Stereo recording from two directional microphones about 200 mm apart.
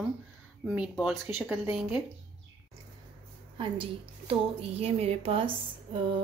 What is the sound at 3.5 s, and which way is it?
A woman's voice, 25° right (ahead or behind).